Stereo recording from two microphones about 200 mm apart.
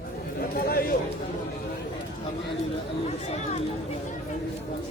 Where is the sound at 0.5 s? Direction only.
50° left (ahead or behind).